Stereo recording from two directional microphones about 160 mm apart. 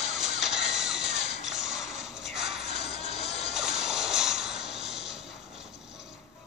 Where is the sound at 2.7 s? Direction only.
40° left (ahead or behind).